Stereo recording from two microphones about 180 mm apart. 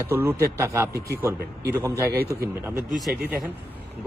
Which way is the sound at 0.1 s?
10° right (ahead or behind).